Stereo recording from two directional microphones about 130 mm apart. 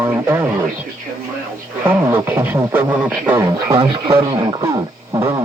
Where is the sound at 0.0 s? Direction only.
15° right (ahead or behind).